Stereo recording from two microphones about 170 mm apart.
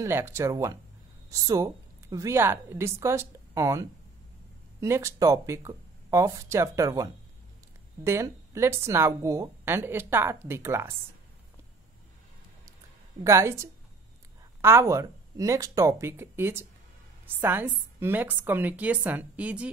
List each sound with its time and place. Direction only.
0.0 s a woman's voice: 15° right (ahead or behind)
13.2 s a woman's voice: 15° right (ahead or behind)